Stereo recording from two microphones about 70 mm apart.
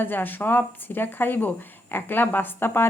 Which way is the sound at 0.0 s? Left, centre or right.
Left.